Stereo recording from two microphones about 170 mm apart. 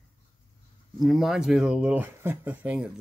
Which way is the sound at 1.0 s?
Centre (ahead or behind).